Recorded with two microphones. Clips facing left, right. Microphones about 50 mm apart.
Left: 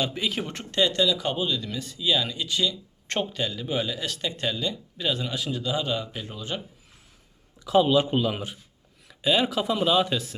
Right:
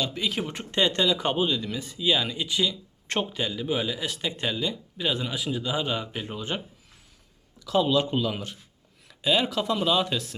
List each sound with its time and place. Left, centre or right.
0.2 s speech: centre
0.6 s speech: right
7.6 s speech: centre